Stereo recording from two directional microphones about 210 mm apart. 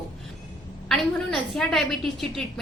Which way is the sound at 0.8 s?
Centre (ahead or behind).